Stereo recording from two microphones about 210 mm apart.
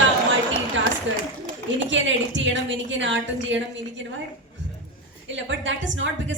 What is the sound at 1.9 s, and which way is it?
A woman's voice, 60° right (ahead or behind).